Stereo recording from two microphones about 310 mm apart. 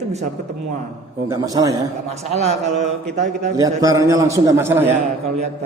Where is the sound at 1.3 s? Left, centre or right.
Centre.